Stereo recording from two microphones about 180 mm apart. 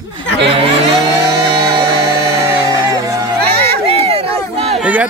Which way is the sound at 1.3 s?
25° right (ahead or behind).